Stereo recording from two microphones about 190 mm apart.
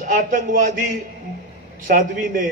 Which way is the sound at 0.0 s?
45° right (ahead or behind).